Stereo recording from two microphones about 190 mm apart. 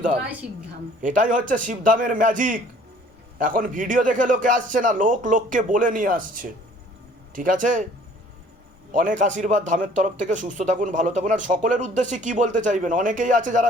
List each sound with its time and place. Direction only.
0.4 s a woman's voice: centre (ahead or behind)
1.0 s a man's voice: 40° right (ahead or behind)
8.9 s a man's voice: 45° right (ahead or behind)